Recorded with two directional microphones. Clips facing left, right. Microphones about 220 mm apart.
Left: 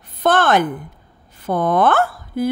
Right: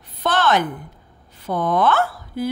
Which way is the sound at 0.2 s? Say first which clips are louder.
Left 4 dB; 50° left (ahead or behind).